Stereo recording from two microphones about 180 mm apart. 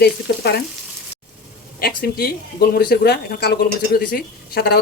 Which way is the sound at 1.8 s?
60° left (ahead or behind).